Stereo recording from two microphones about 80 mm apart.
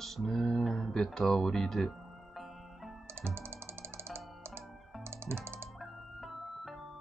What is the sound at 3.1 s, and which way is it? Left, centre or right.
Music, right.